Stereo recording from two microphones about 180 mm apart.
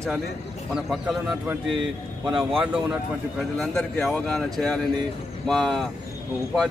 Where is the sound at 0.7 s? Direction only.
Centre (ahead or behind).